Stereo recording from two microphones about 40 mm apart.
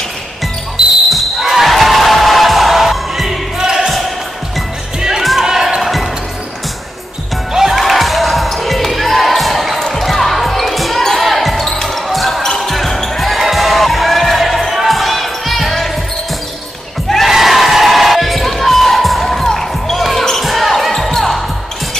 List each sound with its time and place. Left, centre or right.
1.1 s basketball bounce: centre
3.5 s music: centre
5.4 s basketball bounce: centre
5.8 s music: centre
7.5 s music: centre
7.8 s basketball bounce: centre
13.4 s music: centre
14.8 s crowd: centre
17.3 s crowd: centre
20.3 s basketball bounce: centre